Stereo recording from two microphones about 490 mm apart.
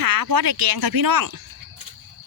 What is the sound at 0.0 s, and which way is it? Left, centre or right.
Speech, right.